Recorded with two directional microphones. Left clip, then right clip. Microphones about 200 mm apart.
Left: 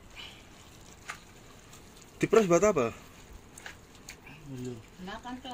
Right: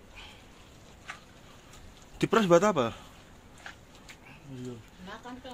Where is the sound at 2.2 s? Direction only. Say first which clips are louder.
Even; 25° right (ahead or behind).